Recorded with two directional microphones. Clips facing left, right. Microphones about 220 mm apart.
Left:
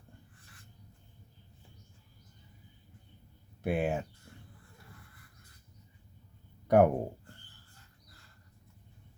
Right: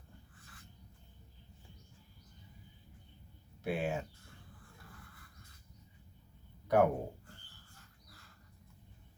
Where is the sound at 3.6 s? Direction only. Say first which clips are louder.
Left 5 dB; 50° left (ahead or behind).